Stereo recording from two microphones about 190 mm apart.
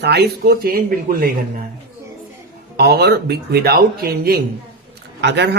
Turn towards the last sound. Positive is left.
turn(degrees=-65)  # may be behind; listen again after turning